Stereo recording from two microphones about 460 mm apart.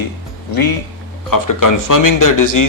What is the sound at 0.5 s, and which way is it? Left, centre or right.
Speech, left.